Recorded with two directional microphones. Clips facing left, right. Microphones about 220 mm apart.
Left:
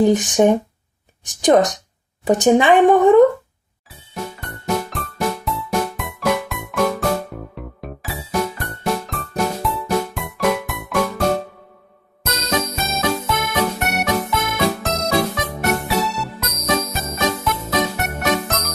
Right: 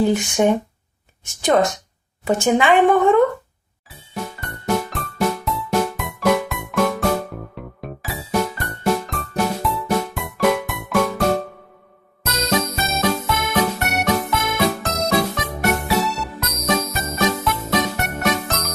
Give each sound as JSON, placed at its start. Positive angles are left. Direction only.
{"t": 0.0, "sound": "a woman's voice", "side_deg": 20}
{"t": 3.8, "sound": "music", "side_deg": 0}